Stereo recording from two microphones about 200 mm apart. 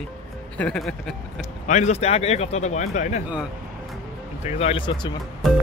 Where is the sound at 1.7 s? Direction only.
35° left (ahead or behind).